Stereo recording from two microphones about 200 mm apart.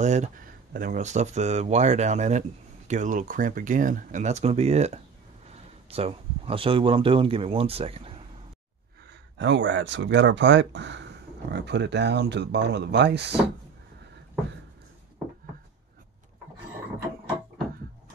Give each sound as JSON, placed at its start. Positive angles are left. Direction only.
{"t": 0.0, "sound": "speech", "side_deg": -35}
{"t": 9.4, "sound": "speech", "side_deg": -65}